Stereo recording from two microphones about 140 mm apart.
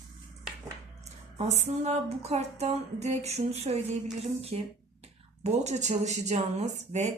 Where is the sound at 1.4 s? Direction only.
50° right (ahead or behind).